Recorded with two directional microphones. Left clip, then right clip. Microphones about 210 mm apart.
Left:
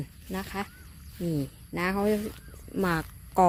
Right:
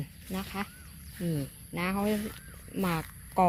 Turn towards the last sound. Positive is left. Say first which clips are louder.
# left 3 dB
turn(degrees=30)  # may be behind; listen again after turning